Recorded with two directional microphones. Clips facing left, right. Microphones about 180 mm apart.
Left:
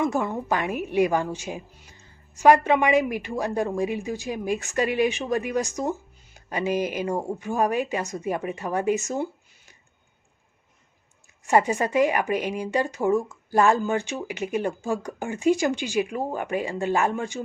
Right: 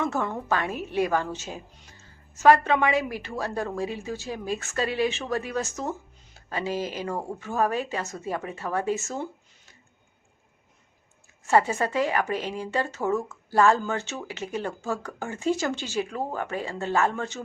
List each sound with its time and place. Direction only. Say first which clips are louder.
0.0 s speech: left 3 dB; 15° left (ahead or behind)
11.4 s speech: left 1 dB; 15° left (ahead or behind)